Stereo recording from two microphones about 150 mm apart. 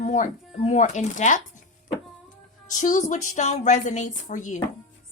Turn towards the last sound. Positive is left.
turn(degrees=55)  # may be behind; listen again after turning